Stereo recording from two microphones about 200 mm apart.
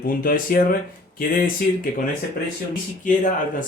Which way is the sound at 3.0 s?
40° left (ahead or behind).